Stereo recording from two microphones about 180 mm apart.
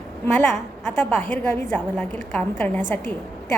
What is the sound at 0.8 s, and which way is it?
A woman's voice, 5° left (ahead or behind).